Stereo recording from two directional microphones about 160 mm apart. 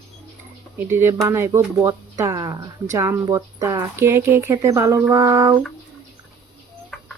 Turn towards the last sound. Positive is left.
turn(degrees=5)  # may be behind; listen again after turning